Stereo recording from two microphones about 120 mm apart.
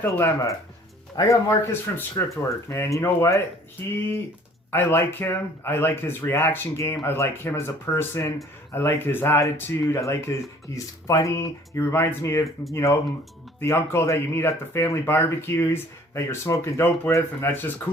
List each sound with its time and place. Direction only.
0.0 s speech: 20° left (ahead or behind)